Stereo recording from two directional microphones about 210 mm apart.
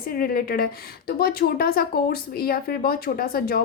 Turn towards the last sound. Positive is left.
turn(degrees=45)  # may be behind; listen again after turning